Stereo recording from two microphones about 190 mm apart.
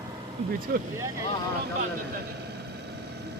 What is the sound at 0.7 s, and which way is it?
Speech, 50° right (ahead or behind).